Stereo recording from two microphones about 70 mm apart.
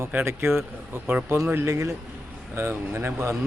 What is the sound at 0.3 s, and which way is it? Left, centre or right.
Speech, right.